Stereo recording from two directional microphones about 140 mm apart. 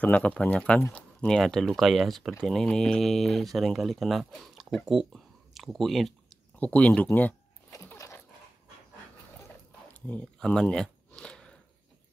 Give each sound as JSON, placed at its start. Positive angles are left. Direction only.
{"t": 0.0, "sound": "speech", "side_deg": 10}
{"t": 7.7, "sound": "dog", "side_deg": 20}
{"t": 10.0, "sound": "a sound", "side_deg": 10}